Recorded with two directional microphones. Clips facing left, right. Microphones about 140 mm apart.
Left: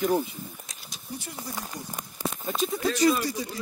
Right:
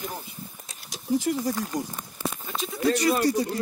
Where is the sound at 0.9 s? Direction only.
90° right.